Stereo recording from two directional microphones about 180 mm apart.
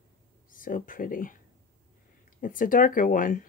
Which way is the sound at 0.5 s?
50° left (ahead or behind).